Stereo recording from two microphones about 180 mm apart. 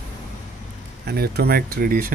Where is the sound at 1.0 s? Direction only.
60° right (ahead or behind).